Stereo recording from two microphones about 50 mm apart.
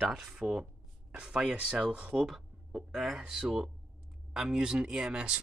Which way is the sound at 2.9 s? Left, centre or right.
Centre.